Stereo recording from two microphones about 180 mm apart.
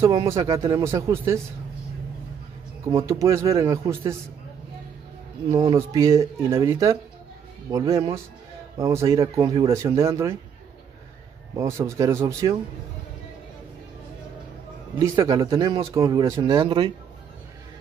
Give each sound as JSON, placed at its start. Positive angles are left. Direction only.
{"t": 0.3, "sound": "speech", "side_deg": -15}
{"t": 2.8, "sound": "speech", "side_deg": -15}
{"t": 5.5, "sound": "speech", "side_deg": -15}
{"t": 11.5, "sound": "speech", "side_deg": -15}
{"t": 15.1, "sound": "speech", "side_deg": -25}